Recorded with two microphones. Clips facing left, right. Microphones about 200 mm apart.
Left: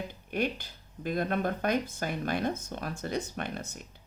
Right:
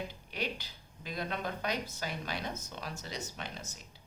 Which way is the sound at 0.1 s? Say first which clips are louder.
Left 7 dB; 50° left (ahead or behind).